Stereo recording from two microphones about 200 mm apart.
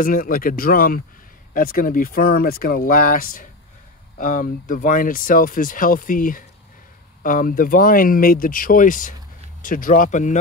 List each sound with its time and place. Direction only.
0.0 s speech: 45° left (ahead or behind)